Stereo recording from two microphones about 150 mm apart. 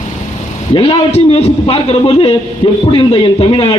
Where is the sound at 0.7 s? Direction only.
35° left (ahead or behind).